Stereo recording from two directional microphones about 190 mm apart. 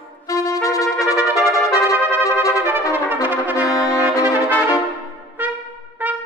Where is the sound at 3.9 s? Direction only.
15° left (ahead or behind).